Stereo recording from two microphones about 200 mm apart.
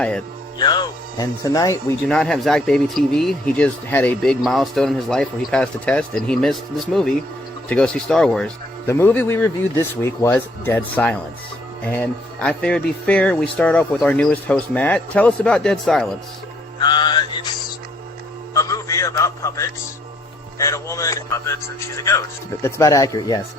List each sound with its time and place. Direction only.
0.6 s speech: 20° left (ahead or behind)
2.0 s speech: 5° left (ahead or behind)
16.8 s music: 20° left (ahead or behind)
18.5 s a man's voice: 15° left (ahead or behind)